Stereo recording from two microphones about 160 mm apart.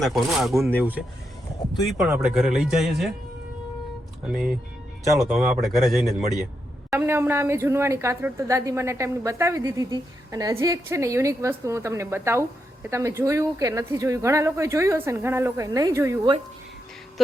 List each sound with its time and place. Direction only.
0.0 s speech: centre (ahead or behind)
4.3 s speech: 5° right (ahead or behind)
6.9 s a woman's voice: 15° right (ahead or behind)